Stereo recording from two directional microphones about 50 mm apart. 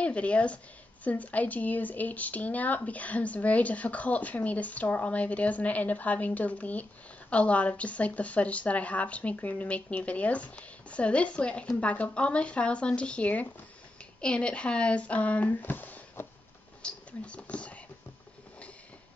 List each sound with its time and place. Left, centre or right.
0.0 s speech: left
16.8 s speech: left